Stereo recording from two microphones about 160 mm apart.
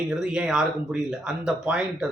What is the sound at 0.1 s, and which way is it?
Speech, 5° right (ahead or behind).